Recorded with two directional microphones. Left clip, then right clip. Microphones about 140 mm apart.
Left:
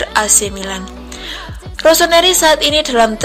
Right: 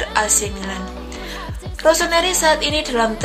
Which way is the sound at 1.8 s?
40° left (ahead or behind).